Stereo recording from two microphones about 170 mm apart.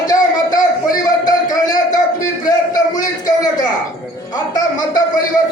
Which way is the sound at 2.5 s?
20° left (ahead or behind).